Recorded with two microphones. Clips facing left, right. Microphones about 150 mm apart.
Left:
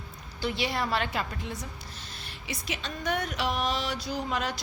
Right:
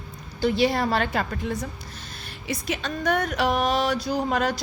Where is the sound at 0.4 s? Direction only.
40° right (ahead or behind).